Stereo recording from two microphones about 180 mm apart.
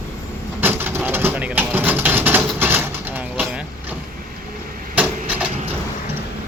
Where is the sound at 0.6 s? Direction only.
10° right (ahead or behind).